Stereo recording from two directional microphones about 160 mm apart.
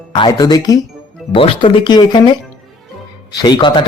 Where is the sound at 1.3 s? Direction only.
35° left (ahead or behind).